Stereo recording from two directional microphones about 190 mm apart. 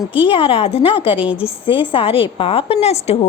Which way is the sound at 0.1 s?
25° left (ahead or behind).